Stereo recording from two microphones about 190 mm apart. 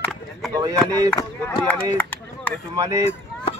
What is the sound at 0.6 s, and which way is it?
Speech, 20° right (ahead or behind).